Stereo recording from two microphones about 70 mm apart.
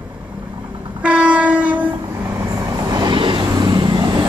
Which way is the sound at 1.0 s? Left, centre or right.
Centre.